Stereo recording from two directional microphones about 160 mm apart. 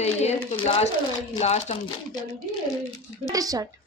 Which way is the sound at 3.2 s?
20° right (ahead or behind).